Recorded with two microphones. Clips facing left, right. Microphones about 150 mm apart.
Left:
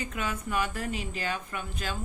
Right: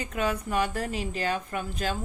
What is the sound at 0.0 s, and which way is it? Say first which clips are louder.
A woman's voice: right 5 dB; 40° right (ahead or behind).